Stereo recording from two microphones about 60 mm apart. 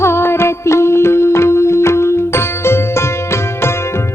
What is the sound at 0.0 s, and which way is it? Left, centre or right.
Music, left.